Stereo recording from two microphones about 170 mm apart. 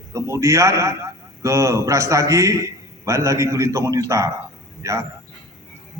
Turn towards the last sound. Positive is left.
turn(degrees=-20)  # may be behind; listen again after turning